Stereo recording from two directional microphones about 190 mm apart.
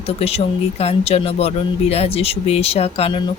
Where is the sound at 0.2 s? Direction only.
30° left (ahead or behind).